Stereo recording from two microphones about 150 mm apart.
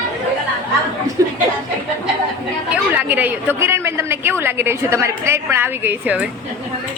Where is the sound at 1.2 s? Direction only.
20° right (ahead or behind).